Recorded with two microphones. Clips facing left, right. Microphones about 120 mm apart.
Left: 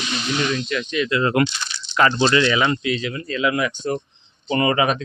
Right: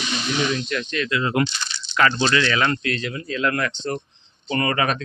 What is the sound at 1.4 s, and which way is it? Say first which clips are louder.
Speech: left 2 dB; 75° left (ahead or behind).